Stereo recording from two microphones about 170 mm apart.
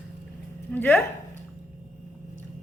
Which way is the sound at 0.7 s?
10° left (ahead or behind).